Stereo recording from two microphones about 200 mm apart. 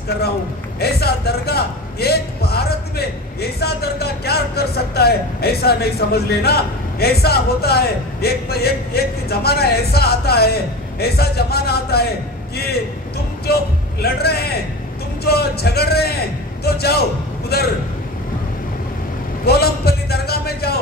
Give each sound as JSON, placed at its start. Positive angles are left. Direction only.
{"t": 0.7, "sound": "a man's voice", "side_deg": 55}
{"t": 19.4, "sound": "a man's voice", "side_deg": 50}